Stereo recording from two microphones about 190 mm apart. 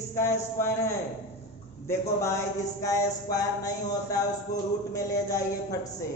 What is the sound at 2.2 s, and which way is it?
Speech, 15° left (ahead or behind).